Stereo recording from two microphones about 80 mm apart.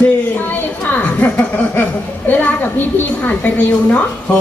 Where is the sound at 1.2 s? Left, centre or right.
Centre.